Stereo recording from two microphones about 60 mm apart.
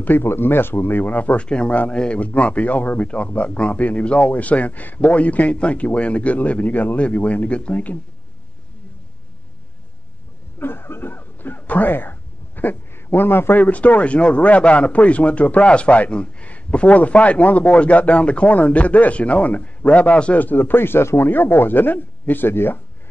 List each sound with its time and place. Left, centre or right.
0.0 s speech: left
10.6 s a sound: left
13.6 s speech: left